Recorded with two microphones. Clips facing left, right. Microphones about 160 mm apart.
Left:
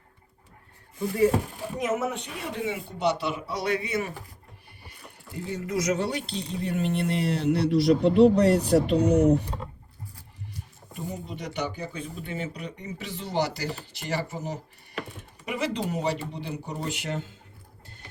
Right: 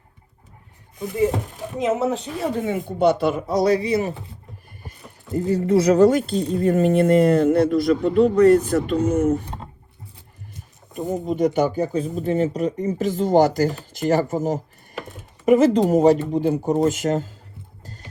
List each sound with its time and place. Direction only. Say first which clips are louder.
0.9 s speech: right 1 dB; 20° right (ahead or behind)
1.8 s speech: right 7 dB; 35° right (ahead or behind)
4.8 s speech: right 4 dB; 45° right (ahead or behind)
10.9 s speech: right 12 dB; 45° right (ahead or behind)
14.9 s typing: right 2 dB; centre (ahead or behind)
15.4 s speech: right 14 dB; 45° right (ahead or behind)